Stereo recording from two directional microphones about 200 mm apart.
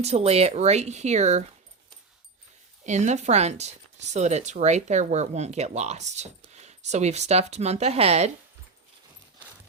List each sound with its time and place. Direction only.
0.0 s speech: 30° right (ahead or behind)
2.8 s speech: 35° right (ahead or behind)